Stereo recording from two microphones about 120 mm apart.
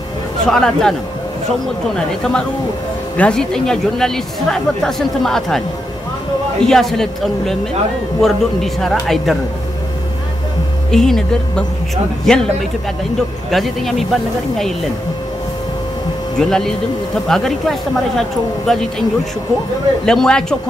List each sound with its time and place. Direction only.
0.5 s speech: 5° left (ahead or behind)
2.0 s speech: 5° left (ahead or behind)
6.6 s speech: 5° left (ahead or behind)
10.9 s speech: 5° left (ahead or behind)
13.5 s speech: centre (ahead or behind)
16.3 s speech: 5° left (ahead or behind)
20.1 s speech: 5° left (ahead or behind)